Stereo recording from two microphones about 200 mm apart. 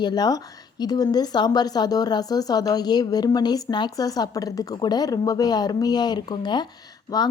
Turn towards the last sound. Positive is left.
turn(degrees=20)  # may be behind; listen again after turning